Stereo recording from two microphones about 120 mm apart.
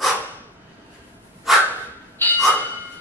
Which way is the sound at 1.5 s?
Centre (ahead or behind).